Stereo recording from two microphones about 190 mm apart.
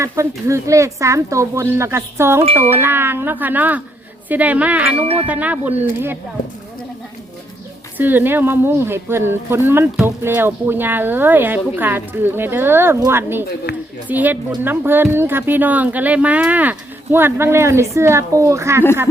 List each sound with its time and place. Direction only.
0.0 s speech: 15° right (ahead or behind)
7.9 s speech: 10° right (ahead or behind)